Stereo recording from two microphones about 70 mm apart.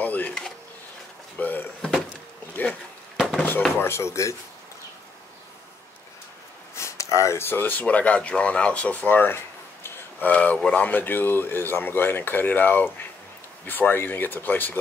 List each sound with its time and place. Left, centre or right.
0.0 s drawer open or close: left
1.4 s door: left
3.2 s a sound: centre
3.8 s speech: left
6.7 s a sound: left
7.4 s speech: left
9.8 s a sound: left
10.6 s speech: centre
10.9 s speech: left